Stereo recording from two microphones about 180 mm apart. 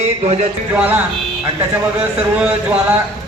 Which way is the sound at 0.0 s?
35° right (ahead or behind).